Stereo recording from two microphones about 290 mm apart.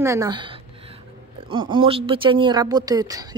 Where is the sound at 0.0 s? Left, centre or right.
Centre.